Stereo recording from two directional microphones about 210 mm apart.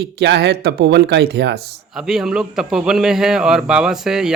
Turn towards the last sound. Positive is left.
turn(degrees=0)  # may be behind; listen again after turning